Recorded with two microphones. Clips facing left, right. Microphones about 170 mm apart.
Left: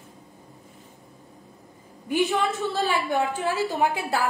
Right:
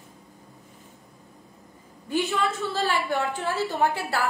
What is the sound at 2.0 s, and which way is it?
A woman's voice, 15° left (ahead or behind).